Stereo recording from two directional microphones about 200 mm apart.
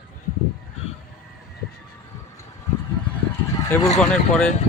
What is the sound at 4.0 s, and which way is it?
Speech, 5° left (ahead or behind).